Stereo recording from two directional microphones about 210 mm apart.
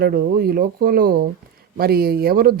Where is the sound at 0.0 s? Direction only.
45° right (ahead or behind).